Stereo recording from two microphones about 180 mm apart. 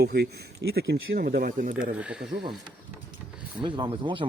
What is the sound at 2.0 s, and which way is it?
Speech, 5° right (ahead or behind).